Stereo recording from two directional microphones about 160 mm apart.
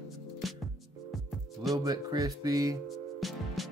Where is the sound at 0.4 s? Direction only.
Centre (ahead or behind).